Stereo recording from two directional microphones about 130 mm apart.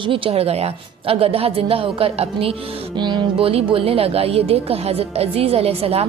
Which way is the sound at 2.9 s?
35° right (ahead or behind).